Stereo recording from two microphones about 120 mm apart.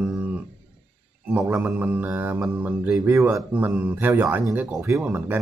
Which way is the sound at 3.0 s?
20° right (ahead or behind).